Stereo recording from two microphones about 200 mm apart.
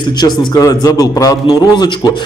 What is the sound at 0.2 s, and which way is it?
A man's voice, 20° left (ahead or behind).